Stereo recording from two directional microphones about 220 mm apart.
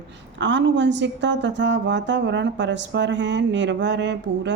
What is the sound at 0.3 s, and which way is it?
A woman's voice, 55° right (ahead or behind).